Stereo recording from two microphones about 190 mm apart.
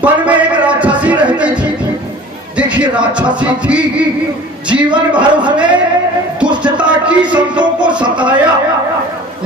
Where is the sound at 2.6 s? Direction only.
5° right (ahead or behind).